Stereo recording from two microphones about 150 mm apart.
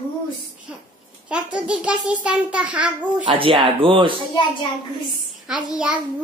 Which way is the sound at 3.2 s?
35° right (ahead or behind).